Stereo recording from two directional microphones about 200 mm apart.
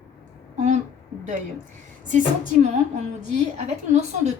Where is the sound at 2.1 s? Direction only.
40° right (ahead or behind).